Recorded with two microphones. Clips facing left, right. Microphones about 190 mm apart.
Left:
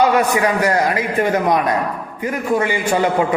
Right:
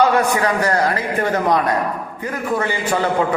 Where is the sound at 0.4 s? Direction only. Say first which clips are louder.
Left 1 dB; 15° left (ahead or behind).